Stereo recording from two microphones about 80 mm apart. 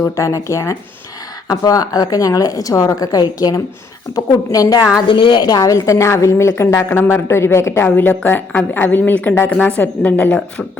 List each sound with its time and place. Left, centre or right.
0.2 s speech: left
1.5 s a woman's voice: left
5.0 s a woman's voice: left; by 10.4 s centre